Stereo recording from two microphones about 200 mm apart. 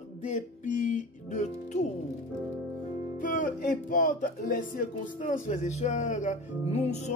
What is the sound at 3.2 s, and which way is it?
Music, 40° left (ahead or behind).